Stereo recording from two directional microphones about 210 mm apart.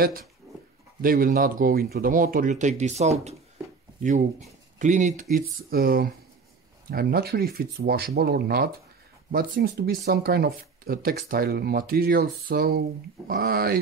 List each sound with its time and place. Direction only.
1.0 s speech: 45° right (ahead or behind)
4.7 s speech: 35° right (ahead or behind)